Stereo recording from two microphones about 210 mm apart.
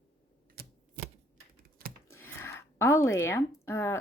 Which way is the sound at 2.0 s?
10° left (ahead or behind).